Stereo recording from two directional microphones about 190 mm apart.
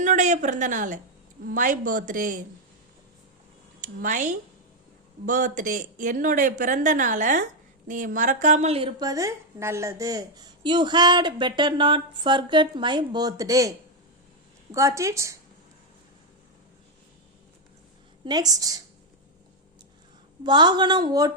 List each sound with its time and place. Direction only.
0.0 s a woman's voice: 40° right (ahead or behind)
3.8 s a woman's voice: 45° right (ahead or behind); by 15.4 s 15° right (ahead or behind)
18.3 s a woman's voice: 20° right (ahead or behind)
20.4 s a woman's voice: 25° right (ahead or behind)